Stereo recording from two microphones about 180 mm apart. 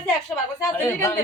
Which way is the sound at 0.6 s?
15° left (ahead or behind).